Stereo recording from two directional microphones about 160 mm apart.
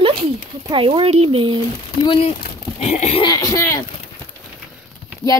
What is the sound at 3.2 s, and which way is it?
Speech, 25° left (ahead or behind).